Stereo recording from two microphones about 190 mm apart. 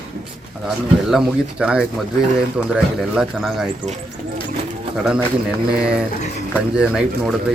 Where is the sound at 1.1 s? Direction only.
5° right (ahead or behind).